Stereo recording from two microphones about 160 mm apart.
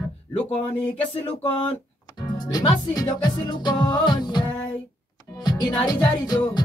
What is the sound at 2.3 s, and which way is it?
Music, 25° left (ahead or behind).